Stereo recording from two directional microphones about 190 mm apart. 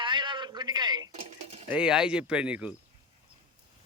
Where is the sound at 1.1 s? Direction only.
35° right (ahead or behind).